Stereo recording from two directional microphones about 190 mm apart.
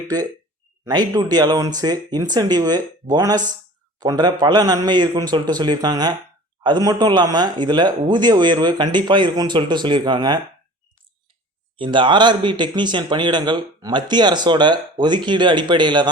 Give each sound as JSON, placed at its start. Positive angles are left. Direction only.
{"t": 0.9, "sound": "speech", "side_deg": -20}
{"t": 11.8, "sound": "speech", "side_deg": -25}